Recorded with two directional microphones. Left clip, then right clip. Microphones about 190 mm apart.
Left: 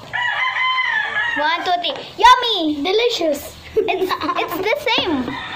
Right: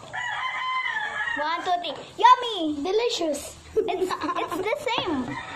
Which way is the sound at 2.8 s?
15° right (ahead or behind).